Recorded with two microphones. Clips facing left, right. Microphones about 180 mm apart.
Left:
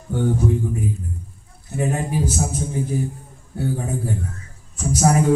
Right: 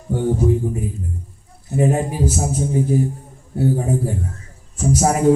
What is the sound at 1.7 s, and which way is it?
Speech, 30° right (ahead or behind).